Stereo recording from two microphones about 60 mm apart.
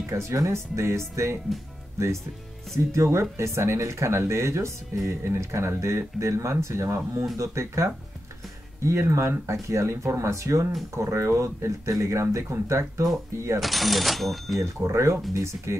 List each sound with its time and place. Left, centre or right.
0.0 s speech: right
13.6 s speech: centre
14.6 s speech: right